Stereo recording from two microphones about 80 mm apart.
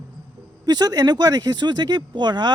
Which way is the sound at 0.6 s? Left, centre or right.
Right.